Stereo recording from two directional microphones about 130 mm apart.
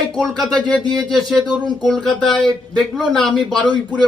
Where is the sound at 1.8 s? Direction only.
5° left (ahead or behind).